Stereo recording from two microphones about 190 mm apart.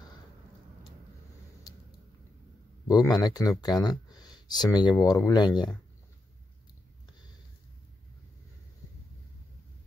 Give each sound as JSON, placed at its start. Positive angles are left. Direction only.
{"t": 2.9, "sound": "speech", "side_deg": 20}